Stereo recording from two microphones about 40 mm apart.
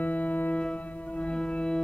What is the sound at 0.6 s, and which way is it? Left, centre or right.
Music, left.